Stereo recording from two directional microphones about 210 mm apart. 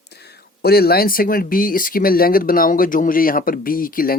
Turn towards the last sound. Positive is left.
turn(degrees=45)  # may be behind; listen again after turning